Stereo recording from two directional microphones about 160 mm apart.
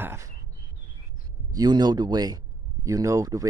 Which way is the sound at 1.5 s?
25° right (ahead or behind).